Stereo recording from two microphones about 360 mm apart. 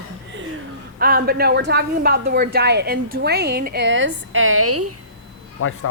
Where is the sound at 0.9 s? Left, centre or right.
Right.